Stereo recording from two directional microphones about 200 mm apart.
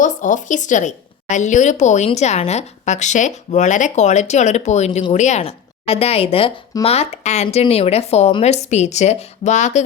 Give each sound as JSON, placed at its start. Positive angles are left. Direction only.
{"t": 0.0, "sound": "a woman's voice", "side_deg": 40}